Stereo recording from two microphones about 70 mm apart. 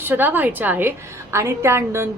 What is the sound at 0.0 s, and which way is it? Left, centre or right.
A woman's voice, right.